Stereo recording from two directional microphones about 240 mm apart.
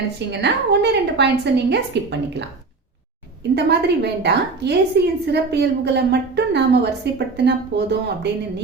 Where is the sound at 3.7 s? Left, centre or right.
Right.